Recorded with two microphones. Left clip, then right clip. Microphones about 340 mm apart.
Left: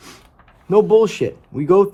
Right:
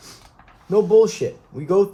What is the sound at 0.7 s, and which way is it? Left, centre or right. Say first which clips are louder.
Speech: left 2 dB; left.